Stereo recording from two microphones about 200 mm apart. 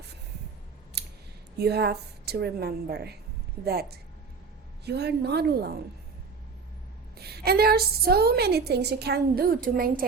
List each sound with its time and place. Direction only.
1.0 s scissors: 55° right (ahead or behind)
1.5 s a woman's voice: 55° right (ahead or behind)
7.2 s a woman's voice: 50° right (ahead or behind)